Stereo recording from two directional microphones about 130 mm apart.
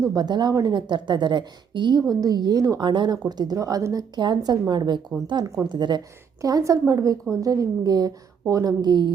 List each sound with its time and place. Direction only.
0.0 s a woman's voice: 30° right (ahead or behind)